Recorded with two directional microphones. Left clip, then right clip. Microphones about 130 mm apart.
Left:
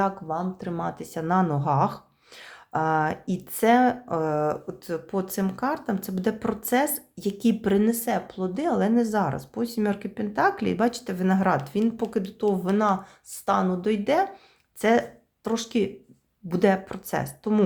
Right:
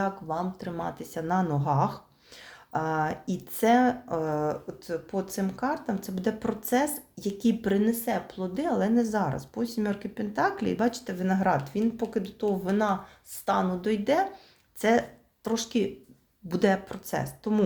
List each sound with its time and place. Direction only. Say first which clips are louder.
0.3 s speech: left 2 dB; 15° left (ahead or behind)